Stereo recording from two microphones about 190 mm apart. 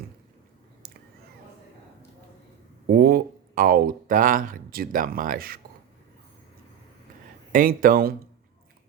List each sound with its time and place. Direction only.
0.8 s a sound: 55° right (ahead or behind)
2.8 s speech: 50° right (ahead or behind)
7.5 s speech: 45° right (ahead or behind)